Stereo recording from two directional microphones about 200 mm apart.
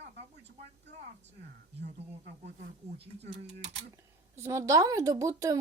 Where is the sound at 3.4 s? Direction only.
35° right (ahead or behind).